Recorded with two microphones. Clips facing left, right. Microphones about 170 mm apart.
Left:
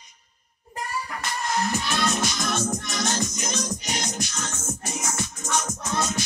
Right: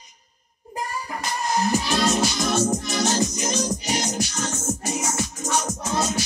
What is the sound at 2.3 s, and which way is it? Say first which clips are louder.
Music: right 5 dB; 15° right (ahead or behind).